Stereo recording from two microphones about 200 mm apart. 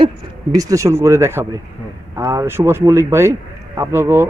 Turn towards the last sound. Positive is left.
turn(degrees=-10)  # may be behind; listen again after turning